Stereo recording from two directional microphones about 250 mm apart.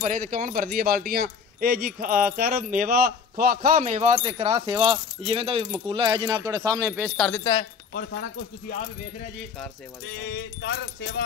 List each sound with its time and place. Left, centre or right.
0.0 s speech: right; by 7.1 s centre
7.2 s speech: centre
10.2 s keys jangling: left